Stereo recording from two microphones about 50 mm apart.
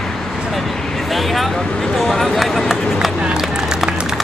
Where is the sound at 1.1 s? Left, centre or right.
Centre.